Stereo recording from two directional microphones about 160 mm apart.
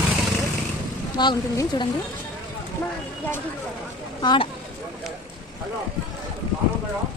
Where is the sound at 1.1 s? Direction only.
25° left (ahead or behind).